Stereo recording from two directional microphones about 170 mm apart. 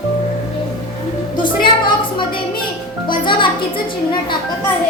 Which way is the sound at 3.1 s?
30° left (ahead or behind).